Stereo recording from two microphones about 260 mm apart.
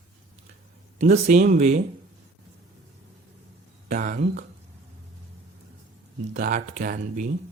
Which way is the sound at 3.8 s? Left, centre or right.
Right.